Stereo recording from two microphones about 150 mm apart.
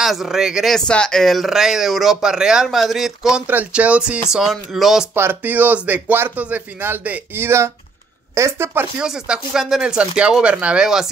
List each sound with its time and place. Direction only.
0.0 s speech: centre (ahead or behind)
5.1 s speech: 15° right (ahead or behind)
9.0 s speech: 5° right (ahead or behind)